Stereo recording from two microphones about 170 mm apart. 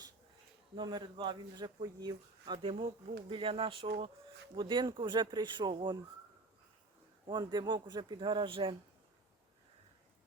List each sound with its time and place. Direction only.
0.8 s speech: 25° right (ahead or behind)
7.3 s speech: 25° right (ahead or behind)